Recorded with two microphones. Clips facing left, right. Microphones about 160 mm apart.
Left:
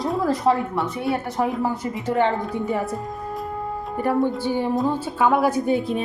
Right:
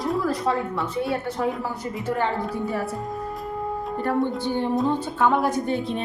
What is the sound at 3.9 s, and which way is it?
A woman's voice, 10° left (ahead or behind).